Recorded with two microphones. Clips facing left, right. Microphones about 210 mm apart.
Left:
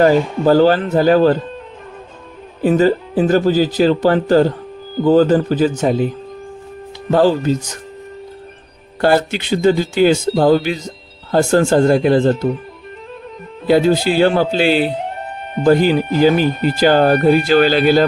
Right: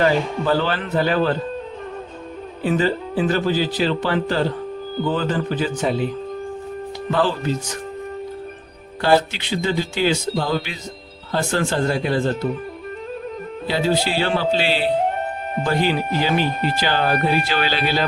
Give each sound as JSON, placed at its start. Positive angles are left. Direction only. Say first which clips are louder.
{"t": 0.0, "sound": "speech", "louder": "left 7 dB", "side_deg": 45}
{"t": 2.6, "sound": "speech", "louder": "left 7 dB", "side_deg": 45}
{"t": 7.1, "sound": "speech", "louder": "left 8 dB", "side_deg": 40}
{"t": 9.0, "sound": "speech", "louder": "left 3 dB", "side_deg": 50}
{"t": 13.7, "sound": "speech", "louder": "left 8 dB", "side_deg": 50}